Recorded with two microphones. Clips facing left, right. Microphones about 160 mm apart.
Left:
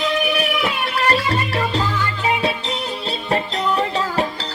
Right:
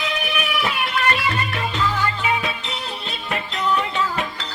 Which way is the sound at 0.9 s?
35° left (ahead or behind).